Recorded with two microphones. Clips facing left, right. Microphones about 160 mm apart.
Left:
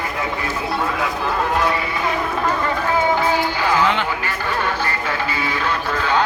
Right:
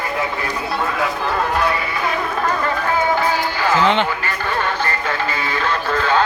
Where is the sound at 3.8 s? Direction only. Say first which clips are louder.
Right 3 dB; 25° right (ahead or behind).